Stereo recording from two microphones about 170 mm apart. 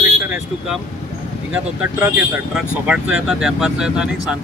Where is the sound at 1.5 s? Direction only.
10° right (ahead or behind).